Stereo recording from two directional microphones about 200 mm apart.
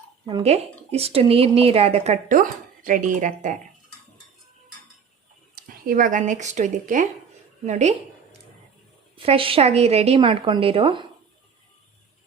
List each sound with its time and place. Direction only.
0.3 s speech: 30° right (ahead or behind)
5.5 s a woman's voice: 45° right (ahead or behind); by 11.0 s 25° right (ahead or behind)